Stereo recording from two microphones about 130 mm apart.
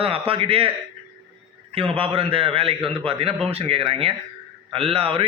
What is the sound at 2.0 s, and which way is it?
A man's voice, 45° right (ahead or behind).